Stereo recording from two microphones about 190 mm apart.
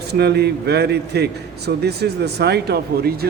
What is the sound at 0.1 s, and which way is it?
A man's voice, 60° right (ahead or behind).